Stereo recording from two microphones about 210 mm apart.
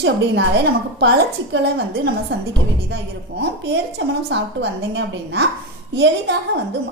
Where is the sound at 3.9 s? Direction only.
55° right (ahead or behind).